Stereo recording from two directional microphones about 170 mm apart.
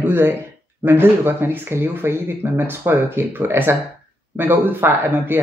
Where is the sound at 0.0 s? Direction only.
10° right (ahead or behind).